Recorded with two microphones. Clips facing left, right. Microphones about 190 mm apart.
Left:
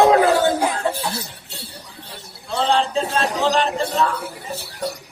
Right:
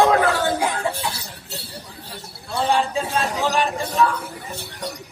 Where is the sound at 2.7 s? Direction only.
10° right (ahead or behind).